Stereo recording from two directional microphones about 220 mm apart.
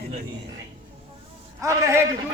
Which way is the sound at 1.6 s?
15° right (ahead or behind).